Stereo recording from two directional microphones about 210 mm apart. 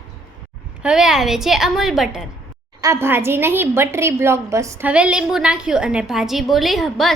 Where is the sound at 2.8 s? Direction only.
15° right (ahead or behind).